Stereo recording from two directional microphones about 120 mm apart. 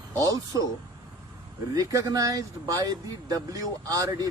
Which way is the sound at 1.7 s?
25° right (ahead or behind).